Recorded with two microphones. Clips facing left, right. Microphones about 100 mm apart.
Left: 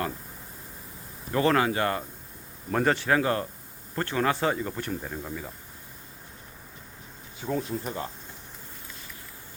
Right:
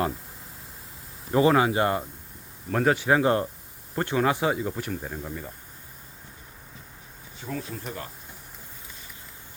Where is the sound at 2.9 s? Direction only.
15° right (ahead or behind).